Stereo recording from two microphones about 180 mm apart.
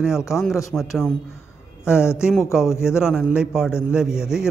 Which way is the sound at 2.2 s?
5° right (ahead or behind).